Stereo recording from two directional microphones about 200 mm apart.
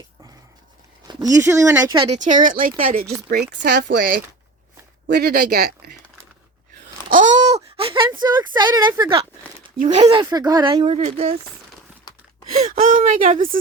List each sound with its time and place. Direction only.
1.0 s speech: 20° right (ahead or behind)
2.1 s speech: 40° right (ahead or behind)
7.1 s a sound: 40° right (ahead or behind); by 9.2 s 25° right (ahead or behind)
9.7 s speech: 35° right (ahead or behind)
10.2 s speech: 20° right (ahead or behind)
12.1 s gasp: 20° left (ahead or behind)
12.5 s speech: 45° right (ahead or behind)